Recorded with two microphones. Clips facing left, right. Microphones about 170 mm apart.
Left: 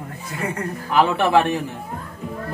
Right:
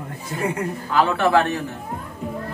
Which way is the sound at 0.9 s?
15° left (ahead or behind).